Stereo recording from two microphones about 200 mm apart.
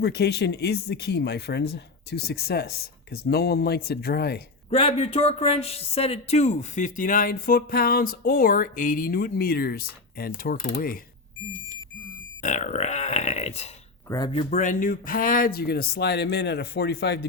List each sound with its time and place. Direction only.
0.0 s speech: 55° left (ahead or behind)
4.7 s speech: 30° left (ahead or behind); by 10.9 s 45° left (ahead or behind)
12.4 s speech: 40° left (ahead or behind)
14.1 s speech: 20° left (ahead or behind)
14.5 s speech: 40° left (ahead or behind); by 17.2 s 55° left (ahead or behind)